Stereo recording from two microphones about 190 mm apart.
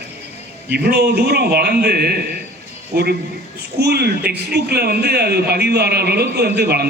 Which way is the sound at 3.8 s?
60° right (ahead or behind).